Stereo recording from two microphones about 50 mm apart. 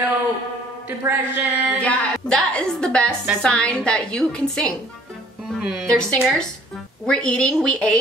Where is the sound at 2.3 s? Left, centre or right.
Left.